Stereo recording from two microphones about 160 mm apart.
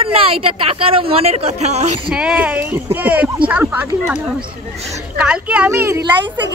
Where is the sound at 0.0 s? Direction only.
35° right (ahead or behind).